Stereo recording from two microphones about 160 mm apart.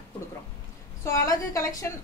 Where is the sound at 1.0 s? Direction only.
20° left (ahead or behind).